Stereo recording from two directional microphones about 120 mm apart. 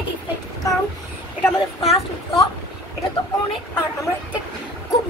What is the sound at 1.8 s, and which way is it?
Speech, 60° left (ahead or behind).